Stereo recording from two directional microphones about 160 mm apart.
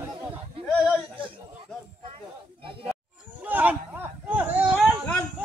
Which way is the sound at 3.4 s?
10° right (ahead or behind).